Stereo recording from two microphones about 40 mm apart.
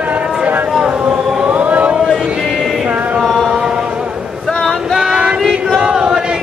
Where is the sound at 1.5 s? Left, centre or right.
Right.